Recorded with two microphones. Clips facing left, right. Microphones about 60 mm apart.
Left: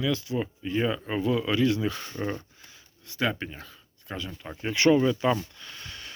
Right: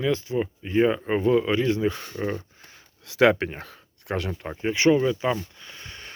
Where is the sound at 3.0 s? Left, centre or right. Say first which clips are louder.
Right 10 dB; right.